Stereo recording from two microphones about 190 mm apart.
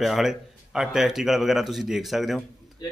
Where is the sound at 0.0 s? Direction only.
Centre (ahead or behind).